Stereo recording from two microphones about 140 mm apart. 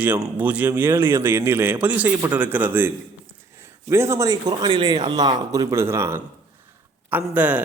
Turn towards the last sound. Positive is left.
turn(degrees=-15)  # may be behind; listen again after turning